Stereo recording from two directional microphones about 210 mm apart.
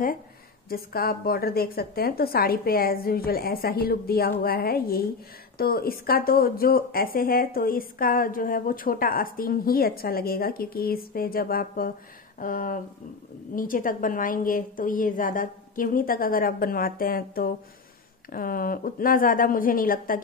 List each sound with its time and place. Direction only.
0.7 s a woman's voice: 45° left (ahead or behind)